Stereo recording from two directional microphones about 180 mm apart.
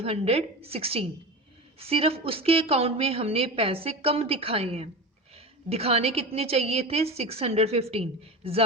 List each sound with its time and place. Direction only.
0.0 s a woman's voice: 35° right (ahead or behind)